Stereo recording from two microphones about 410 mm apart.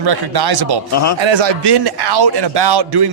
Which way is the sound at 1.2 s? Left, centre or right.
Right.